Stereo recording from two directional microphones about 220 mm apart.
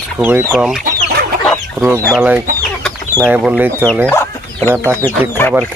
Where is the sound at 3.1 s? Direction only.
5° right (ahead or behind).